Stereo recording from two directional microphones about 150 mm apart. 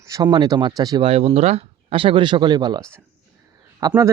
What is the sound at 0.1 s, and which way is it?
Speech, 30° right (ahead or behind).